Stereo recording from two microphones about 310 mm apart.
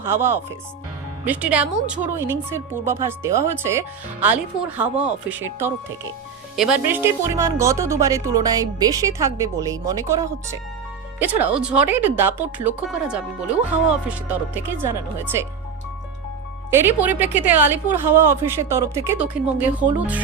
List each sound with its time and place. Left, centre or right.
0.0 s speech: centre
16.7 s speech: centre